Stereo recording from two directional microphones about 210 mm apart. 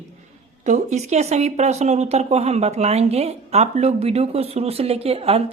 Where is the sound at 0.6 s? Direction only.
35° right (ahead or behind).